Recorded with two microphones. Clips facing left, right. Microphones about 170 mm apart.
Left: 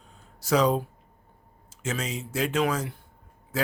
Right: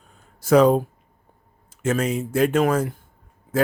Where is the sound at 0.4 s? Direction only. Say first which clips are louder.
Right 8 dB; 55° right (ahead or behind).